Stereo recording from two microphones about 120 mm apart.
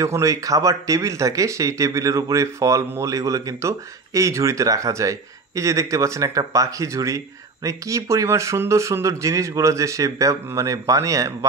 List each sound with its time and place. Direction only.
0.0 s speech: 25° right (ahead or behind)